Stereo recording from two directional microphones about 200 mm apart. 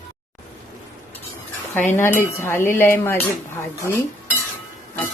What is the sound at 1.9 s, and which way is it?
Speech, 10° left (ahead or behind).